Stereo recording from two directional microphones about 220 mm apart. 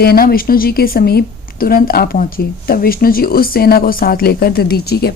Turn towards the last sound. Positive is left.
turn(degrees=45)  # may be behind; listen again after turning